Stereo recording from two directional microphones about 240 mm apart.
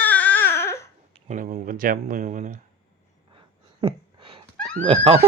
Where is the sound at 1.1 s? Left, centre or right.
Right.